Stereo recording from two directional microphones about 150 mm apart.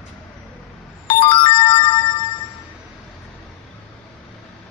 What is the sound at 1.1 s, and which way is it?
Ringtone, 30° left (ahead or behind).